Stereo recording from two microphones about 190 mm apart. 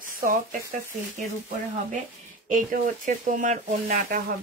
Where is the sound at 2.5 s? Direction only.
45° right (ahead or behind).